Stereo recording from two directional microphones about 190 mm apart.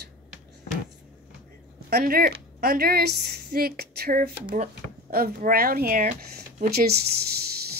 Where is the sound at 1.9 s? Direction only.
55° right (ahead or behind).